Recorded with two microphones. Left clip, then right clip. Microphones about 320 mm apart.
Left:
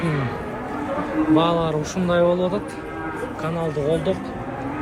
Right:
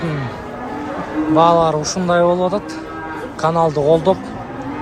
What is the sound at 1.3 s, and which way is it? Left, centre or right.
A man's voice, centre.